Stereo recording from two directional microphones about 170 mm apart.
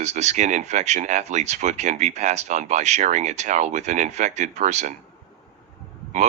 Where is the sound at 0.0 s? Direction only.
40° right (ahead or behind).